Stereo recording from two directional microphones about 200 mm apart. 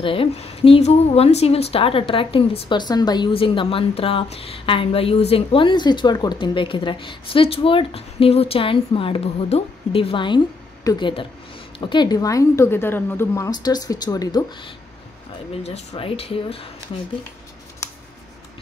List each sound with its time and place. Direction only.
0.0 s a woman's voice: 25° left (ahead or behind)
15.5 s speech: 30° left (ahead or behind)